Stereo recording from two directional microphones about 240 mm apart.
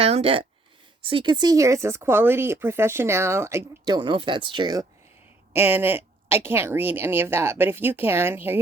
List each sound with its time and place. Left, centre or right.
0.0 s speech: right; by 8.6 s centre